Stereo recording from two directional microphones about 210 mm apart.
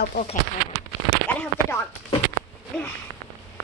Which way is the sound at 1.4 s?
10° left (ahead or behind).